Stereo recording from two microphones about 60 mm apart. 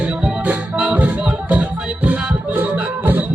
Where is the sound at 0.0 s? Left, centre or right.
Centre.